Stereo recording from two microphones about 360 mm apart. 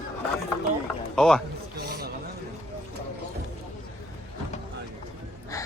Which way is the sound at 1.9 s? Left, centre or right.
Right.